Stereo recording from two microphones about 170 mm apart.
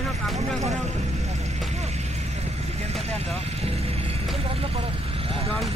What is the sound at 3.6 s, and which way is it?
Speech, 35° right (ahead or behind).